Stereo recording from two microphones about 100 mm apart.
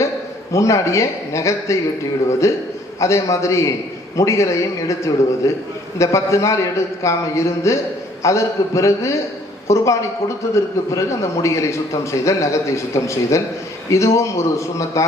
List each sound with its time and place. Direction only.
0.5 s a man's voice: 30° left (ahead or behind)